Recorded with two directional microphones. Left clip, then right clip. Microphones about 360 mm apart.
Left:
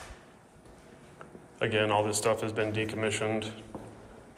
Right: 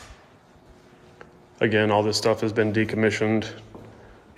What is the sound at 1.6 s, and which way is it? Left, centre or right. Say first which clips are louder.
Speech: right 6 dB; right.